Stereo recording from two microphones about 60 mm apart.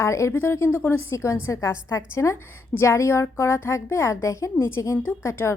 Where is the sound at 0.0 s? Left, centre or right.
Left.